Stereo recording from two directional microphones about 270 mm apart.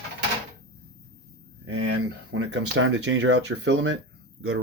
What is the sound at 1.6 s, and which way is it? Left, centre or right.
Speech, right.